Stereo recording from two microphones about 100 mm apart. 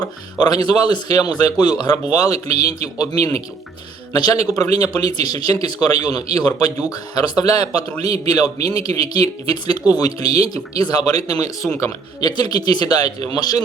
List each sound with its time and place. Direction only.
0.0 s speech: 40° left (ahead or behind)
4.1 s a man's voice: 40° left (ahead or behind)